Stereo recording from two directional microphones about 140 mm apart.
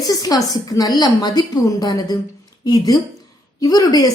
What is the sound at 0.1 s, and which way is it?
A woman's voice, 25° left (ahead or behind).